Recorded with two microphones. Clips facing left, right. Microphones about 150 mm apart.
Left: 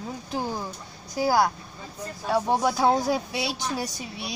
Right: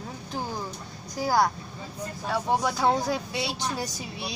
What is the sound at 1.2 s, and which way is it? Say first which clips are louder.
A woman's voice: left 2 dB; 5° left (ahead or behind).